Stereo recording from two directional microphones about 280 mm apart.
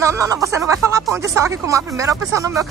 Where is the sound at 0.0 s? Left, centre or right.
Centre.